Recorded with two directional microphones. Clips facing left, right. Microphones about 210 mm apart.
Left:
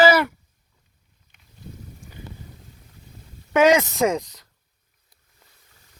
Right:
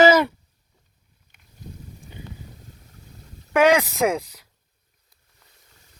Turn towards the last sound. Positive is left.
turn(degrees=-5)  # may be behind; listen again after turning